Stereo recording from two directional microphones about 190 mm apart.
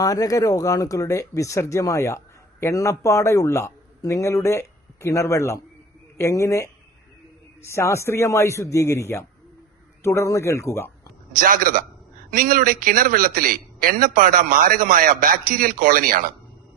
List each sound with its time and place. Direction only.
0.0 s speech: 20° left (ahead or behind)
11.3 s a man's voice: 45° right (ahead or behind)